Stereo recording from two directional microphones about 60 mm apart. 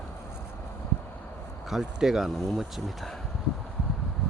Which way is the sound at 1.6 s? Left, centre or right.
Centre.